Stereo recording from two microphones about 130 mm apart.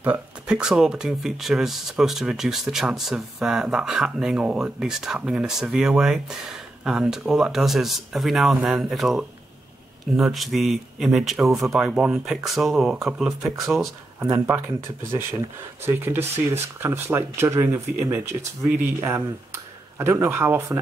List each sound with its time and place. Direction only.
0.0 s speech: 10° right (ahead or behind)
14.2 s speech: 20° right (ahead or behind)
15.8 s speech: 20° right (ahead or behind)